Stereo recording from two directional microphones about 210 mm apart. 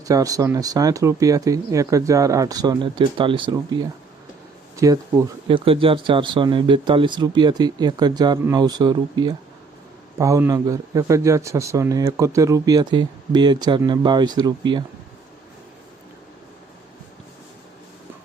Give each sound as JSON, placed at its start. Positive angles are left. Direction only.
{"t": 0.0, "sound": "speech", "side_deg": -15}